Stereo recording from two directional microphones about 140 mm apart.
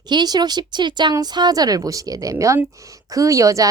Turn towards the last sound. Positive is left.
turn(degrees=-25)  # may be behind; listen again after turning